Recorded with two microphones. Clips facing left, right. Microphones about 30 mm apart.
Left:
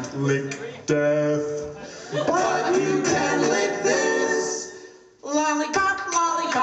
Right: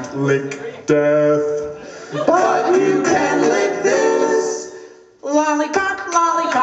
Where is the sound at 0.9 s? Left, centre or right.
Right.